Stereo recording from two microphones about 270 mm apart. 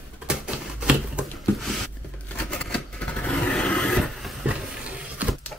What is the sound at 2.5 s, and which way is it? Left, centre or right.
Vehicle, centre.